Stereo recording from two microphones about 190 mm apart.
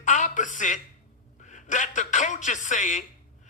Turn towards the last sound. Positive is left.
turn(degrees=40)  # may be behind; listen again after turning